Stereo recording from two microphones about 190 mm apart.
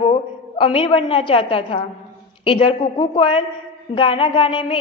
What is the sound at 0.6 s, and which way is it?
A woman's voice, 30° left (ahead or behind).